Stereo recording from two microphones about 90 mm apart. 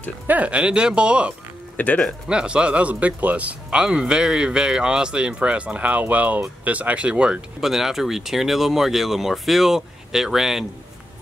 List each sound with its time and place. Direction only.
0.3 s speech: 15° right (ahead or behind)
1.8 s speech: 15° left (ahead or behind)
2.2 s speech: 10° right (ahead or behind)